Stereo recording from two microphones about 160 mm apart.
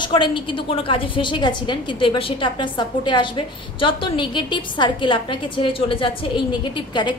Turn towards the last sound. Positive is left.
turn(degrees=30)  # may be behind; listen again after turning